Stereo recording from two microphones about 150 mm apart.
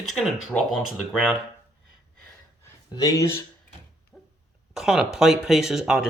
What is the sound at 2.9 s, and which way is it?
Speech, 25° left (ahead or behind).